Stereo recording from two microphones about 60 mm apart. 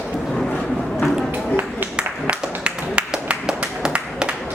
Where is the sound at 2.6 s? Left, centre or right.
Centre.